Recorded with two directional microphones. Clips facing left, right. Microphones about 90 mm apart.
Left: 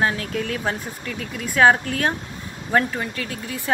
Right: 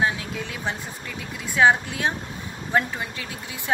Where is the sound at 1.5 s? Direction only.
15° right (ahead or behind).